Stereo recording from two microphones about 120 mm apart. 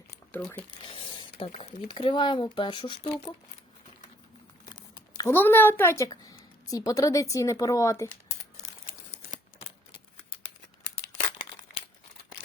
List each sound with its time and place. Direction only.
0.9 s speech: 50° left (ahead or behind)
4.6 s crumpling: 35° left (ahead or behind)
5.2 s a woman's voice: 15° left (ahead or behind)